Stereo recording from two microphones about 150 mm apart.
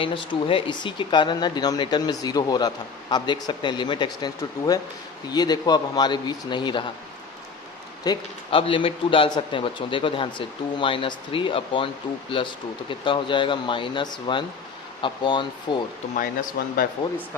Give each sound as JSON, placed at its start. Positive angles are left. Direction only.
{"t": 0.0, "sound": "speech", "side_deg": 35}
{"t": 8.0, "sound": "a man's voice", "side_deg": 30}
{"t": 16.1, "sound": "speech", "side_deg": 70}